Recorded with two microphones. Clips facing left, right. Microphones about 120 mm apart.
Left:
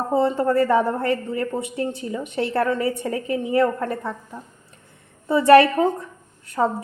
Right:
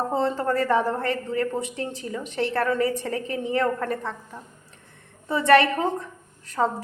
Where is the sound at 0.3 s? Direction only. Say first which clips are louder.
Left 4 dB; 25° left (ahead or behind).